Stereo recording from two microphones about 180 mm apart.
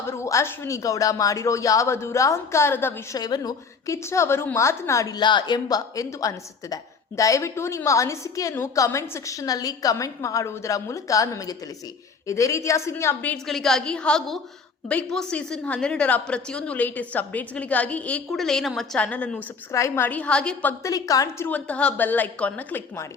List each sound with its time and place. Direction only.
0.1 s a woman's voice: 15° left (ahead or behind)
13.3 s a woman's voice: centre (ahead or behind)